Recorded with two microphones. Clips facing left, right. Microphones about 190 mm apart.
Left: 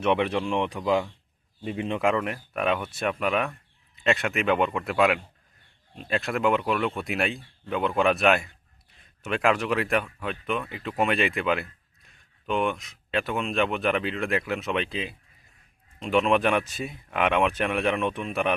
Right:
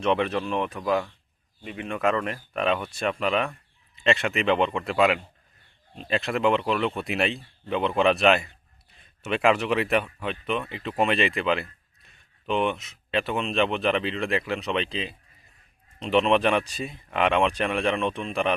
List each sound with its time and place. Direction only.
0.0 s speech: 10° left (ahead or behind)
1.6 s speech: 25° left (ahead or behind)
2.0 s speech: 10° left (ahead or behind)
16.0 s speech: 5° left (ahead or behind)